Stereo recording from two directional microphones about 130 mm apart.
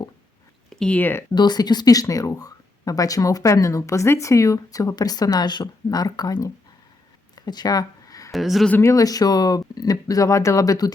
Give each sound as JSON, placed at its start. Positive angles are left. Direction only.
{"t": 0.7, "sound": "speech", "side_deg": 5}
{"t": 1.4, "sound": "speech", "side_deg": 30}
{"t": 7.3, "sound": "a sound", "side_deg": 30}
{"t": 8.3, "sound": "speech", "side_deg": 0}
{"t": 8.7, "sound": "speech", "side_deg": 25}